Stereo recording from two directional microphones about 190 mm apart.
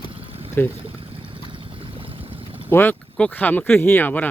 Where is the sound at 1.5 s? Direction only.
25° right (ahead or behind).